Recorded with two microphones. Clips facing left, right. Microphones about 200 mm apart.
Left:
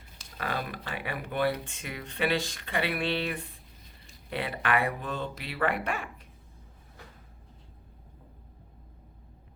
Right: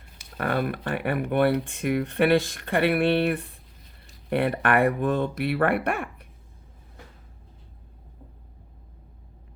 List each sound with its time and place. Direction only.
0.3 s speech: 55° right (ahead or behind)